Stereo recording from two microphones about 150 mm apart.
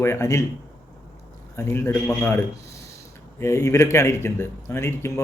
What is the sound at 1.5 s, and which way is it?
Speech, 20° left (ahead or behind).